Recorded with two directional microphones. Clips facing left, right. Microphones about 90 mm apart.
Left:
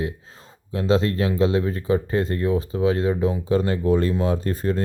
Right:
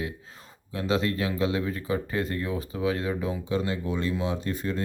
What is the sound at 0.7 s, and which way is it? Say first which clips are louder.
Speech: left 6 dB; 30° left (ahead or behind).